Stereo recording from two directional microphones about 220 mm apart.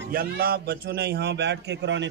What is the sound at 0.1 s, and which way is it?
A man's voice, 45° right (ahead or behind).